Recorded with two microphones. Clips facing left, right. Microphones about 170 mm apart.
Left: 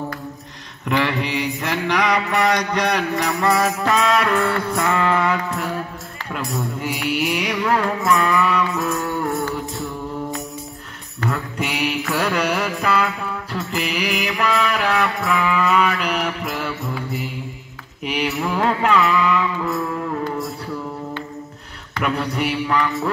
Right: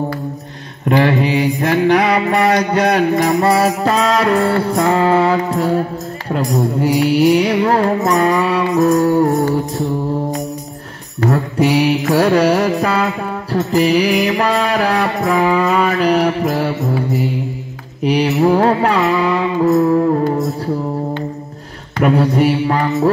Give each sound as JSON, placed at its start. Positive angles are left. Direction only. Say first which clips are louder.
{"t": 0.8, "sound": "music", "louder": "right 8 dB", "side_deg": -40}
{"t": 11.2, "sound": "mantra", "louder": "right 10 dB", "side_deg": -35}
{"t": 21.9, "sound": "music", "louder": "right 9 dB", "side_deg": -35}